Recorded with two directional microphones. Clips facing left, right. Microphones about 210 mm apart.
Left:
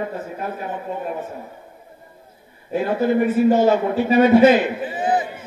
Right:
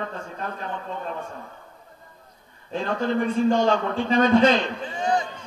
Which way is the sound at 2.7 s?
10° left (ahead or behind).